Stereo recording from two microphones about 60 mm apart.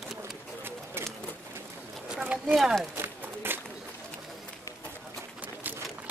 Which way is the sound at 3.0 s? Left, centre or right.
Right.